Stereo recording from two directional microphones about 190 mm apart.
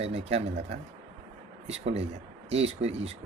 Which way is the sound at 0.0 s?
35° right (ahead or behind).